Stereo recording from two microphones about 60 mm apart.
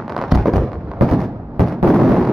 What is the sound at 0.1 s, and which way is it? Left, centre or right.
Fireworks, centre.